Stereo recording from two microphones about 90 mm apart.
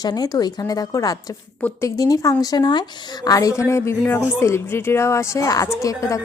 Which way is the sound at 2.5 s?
50° left (ahead or behind).